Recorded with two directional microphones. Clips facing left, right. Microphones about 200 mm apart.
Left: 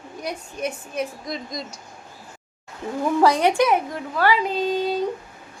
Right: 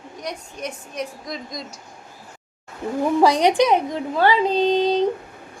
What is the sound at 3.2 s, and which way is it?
Speech, 15° right (ahead or behind).